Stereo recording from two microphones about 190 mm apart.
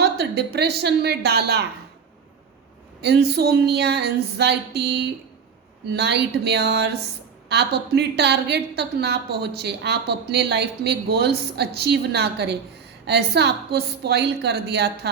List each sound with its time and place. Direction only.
0.0 s a woman's voice: 60° right (ahead or behind)
3.0 s a woman's voice: 60° right (ahead or behind)